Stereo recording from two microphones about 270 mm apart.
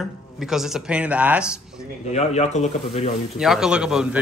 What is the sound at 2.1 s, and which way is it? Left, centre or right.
Speech, left.